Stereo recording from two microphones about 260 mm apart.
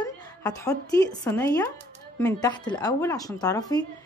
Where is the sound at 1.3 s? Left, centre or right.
Centre.